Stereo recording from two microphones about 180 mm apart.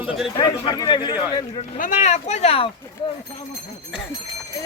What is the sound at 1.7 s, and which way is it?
Speech, 45° left (ahead or behind).